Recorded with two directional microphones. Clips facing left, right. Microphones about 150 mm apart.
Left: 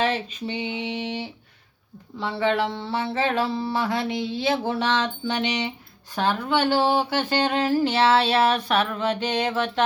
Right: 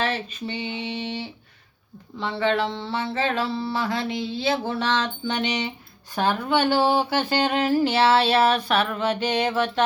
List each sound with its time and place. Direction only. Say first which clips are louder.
0.0 s mantra: left 2 dB; 15° left (ahead or behind)
6.1 s speech: right 1 dB; 10° right (ahead or behind)